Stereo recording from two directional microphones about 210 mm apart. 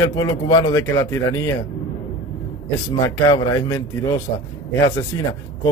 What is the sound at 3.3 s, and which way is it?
Speech, 15° left (ahead or behind).